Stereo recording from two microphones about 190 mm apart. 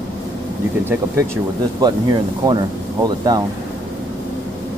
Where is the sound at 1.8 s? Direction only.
20° right (ahead or behind).